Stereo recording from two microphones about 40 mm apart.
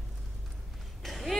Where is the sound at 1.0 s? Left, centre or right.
Centre.